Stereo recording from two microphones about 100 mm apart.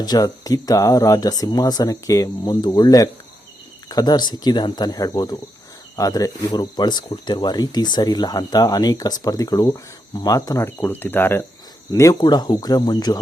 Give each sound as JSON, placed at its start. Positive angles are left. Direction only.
{"t": 0.0, "sound": "speech", "side_deg": 40}
{"t": 10.7, "sound": "cricket", "side_deg": 25}
{"t": 12.2, "sound": "speech", "side_deg": 45}